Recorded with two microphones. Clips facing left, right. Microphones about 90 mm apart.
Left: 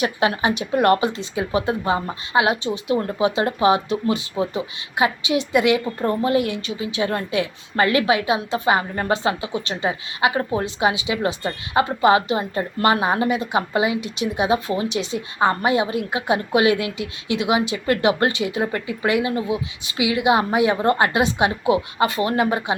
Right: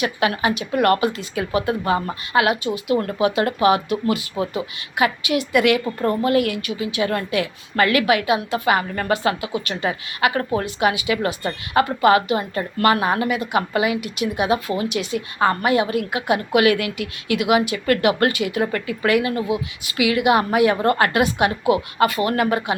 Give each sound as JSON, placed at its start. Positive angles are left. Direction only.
{"t": 0.0, "sound": "speech", "side_deg": 30}